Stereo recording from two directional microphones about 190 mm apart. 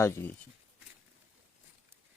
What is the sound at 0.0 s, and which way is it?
Speech, 10° left (ahead or behind).